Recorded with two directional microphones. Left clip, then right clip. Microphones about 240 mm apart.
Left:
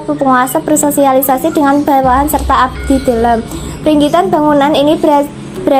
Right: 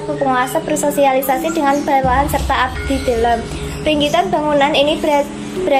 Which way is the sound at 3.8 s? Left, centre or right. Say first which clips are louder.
Left 5 dB; left.